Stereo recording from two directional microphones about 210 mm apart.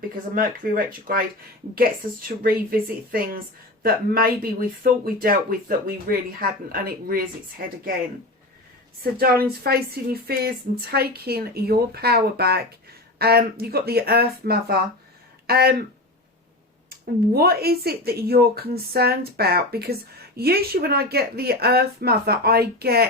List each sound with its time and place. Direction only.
0.3 s speech: 40° right (ahead or behind)
9.1 s speech: 45° right (ahead or behind)
16.9 s speech: 45° right (ahead or behind)